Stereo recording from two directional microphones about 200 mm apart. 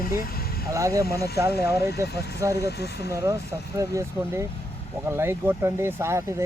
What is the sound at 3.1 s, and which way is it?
Speech, 15° right (ahead or behind).